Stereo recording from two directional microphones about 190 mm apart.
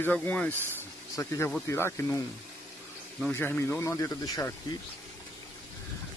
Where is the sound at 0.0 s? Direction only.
10° left (ahead or behind).